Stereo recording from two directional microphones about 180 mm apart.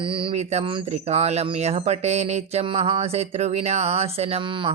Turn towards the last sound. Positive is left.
turn(degrees=-30)  # may be behind; listen again after turning